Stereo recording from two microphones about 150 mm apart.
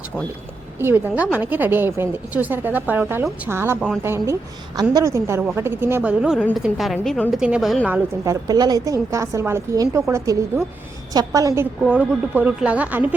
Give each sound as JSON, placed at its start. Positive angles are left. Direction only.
{"t": 0.8, "sound": "a woman's voice", "side_deg": -15}
{"t": 3.8, "sound": "a woman's voice", "side_deg": 0}
{"t": 4.0, "sound": "a woman's voice", "side_deg": -15}
{"t": 8.2, "sound": "a woman's voice", "side_deg": -25}